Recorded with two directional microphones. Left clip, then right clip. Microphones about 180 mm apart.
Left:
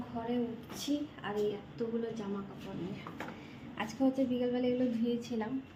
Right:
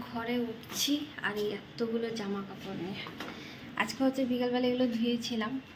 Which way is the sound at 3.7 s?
5° right (ahead or behind).